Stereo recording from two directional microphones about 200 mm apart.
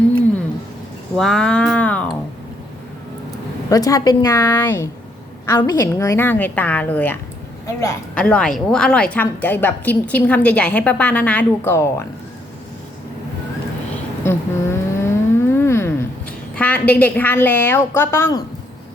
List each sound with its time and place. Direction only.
1.1 s cat: centre (ahead or behind)
3.7 s a woman's voice: 15° left (ahead or behind)
14.3 s a sound: 10° left (ahead or behind)
16.6 s a woman's voice: 10° left (ahead or behind)